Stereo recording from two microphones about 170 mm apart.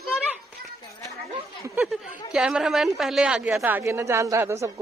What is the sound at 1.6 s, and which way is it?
A woman's voice, 10° right (ahead or behind).